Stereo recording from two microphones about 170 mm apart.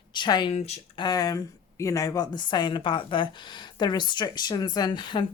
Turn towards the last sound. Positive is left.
turn(degrees=30)  # may be behind; listen again after turning